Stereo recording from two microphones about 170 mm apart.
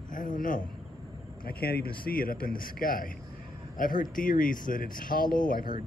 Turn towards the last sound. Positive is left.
turn(degrees=55)  # may be behind; listen again after turning